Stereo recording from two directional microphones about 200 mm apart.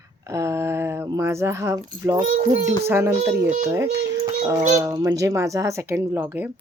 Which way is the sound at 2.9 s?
10° right (ahead or behind).